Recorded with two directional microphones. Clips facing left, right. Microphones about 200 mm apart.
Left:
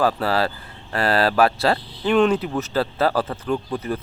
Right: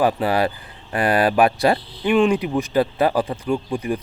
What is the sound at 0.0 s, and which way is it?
Speech, 15° right (ahead or behind).